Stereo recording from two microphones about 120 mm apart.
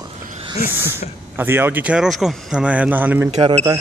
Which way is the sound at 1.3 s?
20° right (ahead or behind).